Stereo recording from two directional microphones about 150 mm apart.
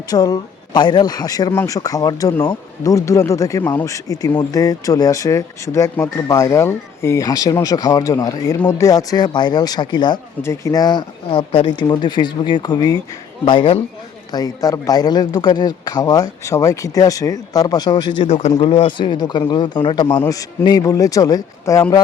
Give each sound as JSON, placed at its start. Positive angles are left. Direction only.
{"t": 0.1, "sound": "a man's voice", "side_deg": 25}